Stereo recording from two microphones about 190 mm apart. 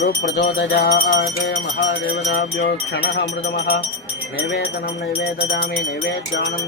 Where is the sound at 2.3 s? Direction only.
60° left (ahead or behind).